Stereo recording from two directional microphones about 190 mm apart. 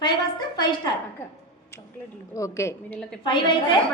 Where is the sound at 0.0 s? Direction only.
20° left (ahead or behind).